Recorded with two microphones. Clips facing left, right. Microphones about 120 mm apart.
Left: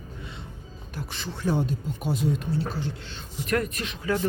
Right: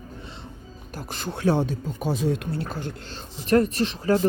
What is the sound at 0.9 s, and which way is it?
Speech, 50° right (ahead or behind).